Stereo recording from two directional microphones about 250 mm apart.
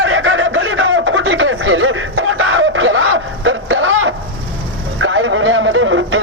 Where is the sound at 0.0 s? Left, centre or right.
Right.